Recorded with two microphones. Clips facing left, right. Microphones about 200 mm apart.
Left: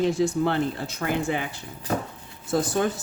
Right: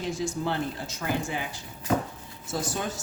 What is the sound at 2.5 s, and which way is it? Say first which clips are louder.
Speech: left 8 dB; 55° left (ahead or behind).